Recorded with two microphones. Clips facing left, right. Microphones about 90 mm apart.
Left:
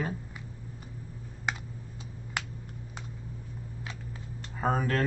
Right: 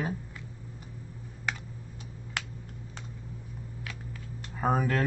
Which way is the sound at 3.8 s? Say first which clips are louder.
Even; 25° left (ahead or behind).